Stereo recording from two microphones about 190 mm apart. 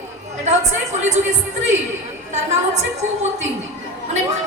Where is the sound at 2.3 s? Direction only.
35° right (ahead or behind).